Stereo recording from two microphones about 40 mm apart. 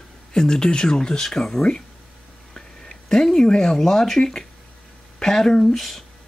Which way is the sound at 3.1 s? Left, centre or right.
Centre.